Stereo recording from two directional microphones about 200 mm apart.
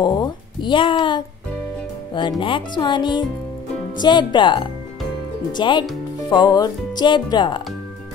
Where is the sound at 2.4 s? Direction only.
25° left (ahead or behind).